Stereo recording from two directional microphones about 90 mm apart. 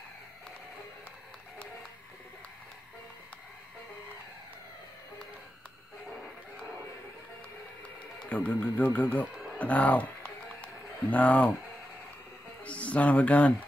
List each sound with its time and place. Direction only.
8.3 s speech: 15° left (ahead or behind)
9.6 s a sound: 15° left (ahead or behind)
12.6 s speech: 15° left (ahead or behind)